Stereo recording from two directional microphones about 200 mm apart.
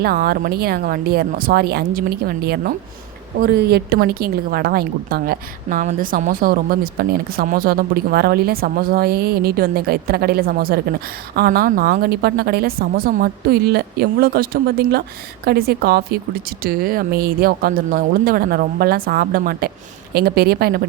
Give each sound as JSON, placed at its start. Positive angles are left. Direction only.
{"t": 0.0, "sound": "a woman's voice", "side_deg": -50}